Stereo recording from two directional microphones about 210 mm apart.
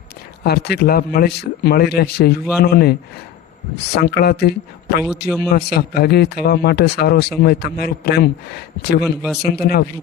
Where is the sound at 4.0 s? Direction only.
50° left (ahead or behind).